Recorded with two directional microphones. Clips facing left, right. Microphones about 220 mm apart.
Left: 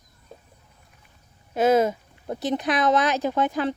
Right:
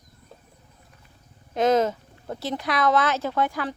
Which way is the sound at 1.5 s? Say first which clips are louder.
Left 1 dB; 10° left (ahead or behind).